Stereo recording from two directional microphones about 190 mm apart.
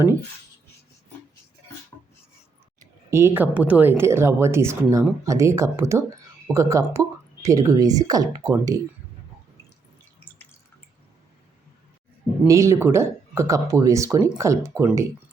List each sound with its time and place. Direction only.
3.1 s speech: 15° right (ahead or behind)
12.5 s speech: 15° right (ahead or behind)